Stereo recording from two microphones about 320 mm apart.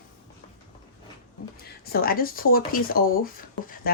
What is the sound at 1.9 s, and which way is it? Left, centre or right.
Speech, left.